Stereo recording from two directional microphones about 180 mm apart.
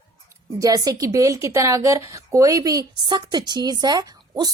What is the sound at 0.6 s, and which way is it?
A woman's voice, 20° right (ahead or behind).